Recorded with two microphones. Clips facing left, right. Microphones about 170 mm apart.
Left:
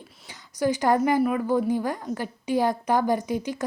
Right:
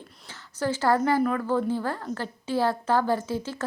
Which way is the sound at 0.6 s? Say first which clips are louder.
Left 2 dB; 15° left (ahead or behind).